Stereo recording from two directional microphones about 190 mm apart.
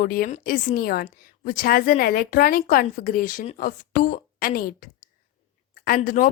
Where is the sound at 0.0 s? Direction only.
50° left (ahead or behind).